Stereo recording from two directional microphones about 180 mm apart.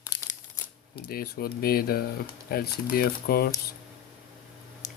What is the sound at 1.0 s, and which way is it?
Speech, 55° left (ahead or behind).